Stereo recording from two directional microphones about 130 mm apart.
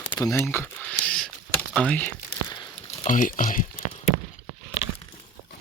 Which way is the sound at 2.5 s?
35° left (ahead or behind).